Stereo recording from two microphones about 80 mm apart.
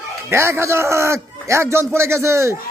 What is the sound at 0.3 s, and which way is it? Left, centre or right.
A man's voice, right.